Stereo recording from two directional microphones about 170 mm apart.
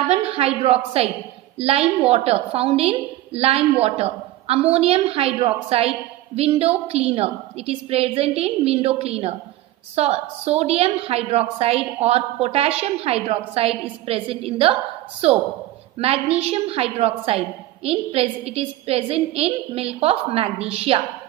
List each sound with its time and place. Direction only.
0.1 s a woman's voice: 35° right (ahead or behind)